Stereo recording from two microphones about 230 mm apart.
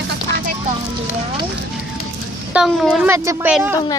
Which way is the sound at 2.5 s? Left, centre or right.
Centre.